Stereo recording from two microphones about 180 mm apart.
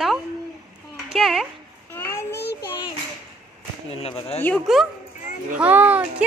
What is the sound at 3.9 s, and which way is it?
Speech, 35° left (ahead or behind).